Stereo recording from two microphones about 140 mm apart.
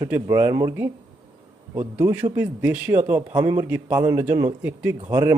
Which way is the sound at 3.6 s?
10° right (ahead or behind).